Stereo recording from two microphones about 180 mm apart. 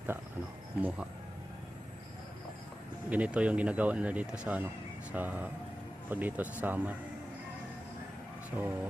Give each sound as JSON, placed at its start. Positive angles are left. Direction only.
{"t": 0.8, "sound": "speech", "side_deg": -10}
{"t": 3.1, "sound": "speech", "side_deg": -5}
{"t": 8.4, "sound": "speech", "side_deg": -10}